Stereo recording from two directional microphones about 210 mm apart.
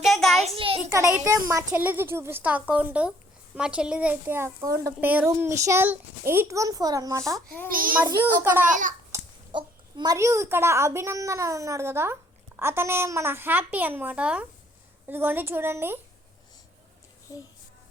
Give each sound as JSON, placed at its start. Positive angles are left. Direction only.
{"t": 0.0, "sound": "a sound", "side_deg": 0}
{"t": 0.4, "sound": "a sound", "side_deg": -25}
{"t": 0.9, "sound": "a child's voice", "side_deg": -10}
{"t": 7.3, "sound": "a child's voice", "side_deg": 10}
{"t": 7.7, "sound": "babbling", "side_deg": -40}
{"t": 8.2, "sound": "a child's voice", "side_deg": -10}
{"t": 8.6, "sound": "babbling", "side_deg": -40}
{"t": 9.1, "sound": "a child's voice", "side_deg": -20}
{"t": 17.3, "sound": "a child's voice", "side_deg": 15}